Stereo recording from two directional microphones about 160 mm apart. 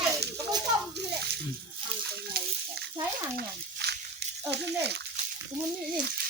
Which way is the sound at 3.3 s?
90° right.